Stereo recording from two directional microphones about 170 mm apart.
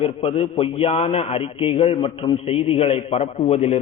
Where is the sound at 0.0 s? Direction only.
35° left (ahead or behind).